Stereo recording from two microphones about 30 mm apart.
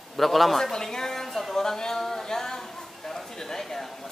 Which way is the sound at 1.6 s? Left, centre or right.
Centre.